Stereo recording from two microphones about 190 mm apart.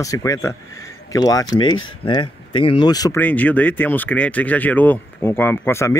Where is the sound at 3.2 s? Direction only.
10° left (ahead or behind).